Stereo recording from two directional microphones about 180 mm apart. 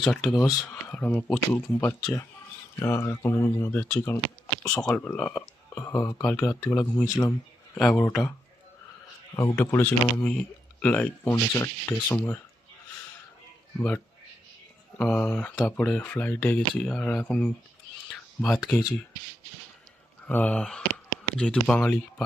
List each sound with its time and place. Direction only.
0.0 s speech: centre (ahead or behind)
9.3 s speech: 15° left (ahead or behind)
13.7 s speech: 10° left (ahead or behind)
20.2 s speech: 10° left (ahead or behind)